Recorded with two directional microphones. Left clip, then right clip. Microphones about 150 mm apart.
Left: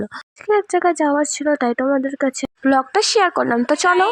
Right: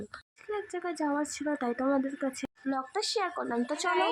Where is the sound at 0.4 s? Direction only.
50° left (ahead or behind); by 2.3 s 35° left (ahead or behind).